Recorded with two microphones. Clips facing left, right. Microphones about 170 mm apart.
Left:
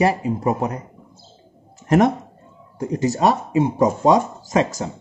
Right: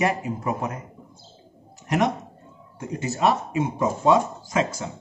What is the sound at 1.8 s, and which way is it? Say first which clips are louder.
Speech: left 7 dB; 50° left (ahead or behind).